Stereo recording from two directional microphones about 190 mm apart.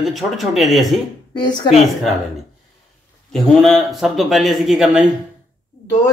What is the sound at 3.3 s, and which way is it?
Speech, centre (ahead or behind).